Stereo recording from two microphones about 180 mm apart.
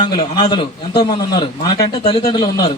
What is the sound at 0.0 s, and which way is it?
A man's voice, 25° left (ahead or behind).